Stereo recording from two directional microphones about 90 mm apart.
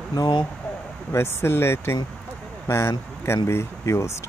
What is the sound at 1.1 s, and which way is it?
Speech, 30° left (ahead or behind).